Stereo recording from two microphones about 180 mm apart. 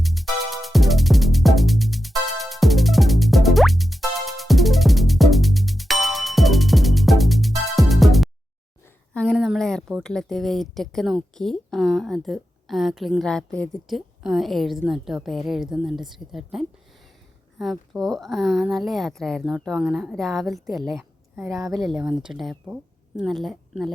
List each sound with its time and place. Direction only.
0.0 s music: centre (ahead or behind)
9.1 s a sound: centre (ahead or behind)
10.0 s a woman's voice: 5° left (ahead or behind)
21.6 s speech: 20° right (ahead or behind)
22.0 s speech: 5° right (ahead or behind)